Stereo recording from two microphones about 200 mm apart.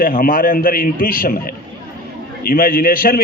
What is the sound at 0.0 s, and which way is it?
A man's voice, 45° left (ahead or behind).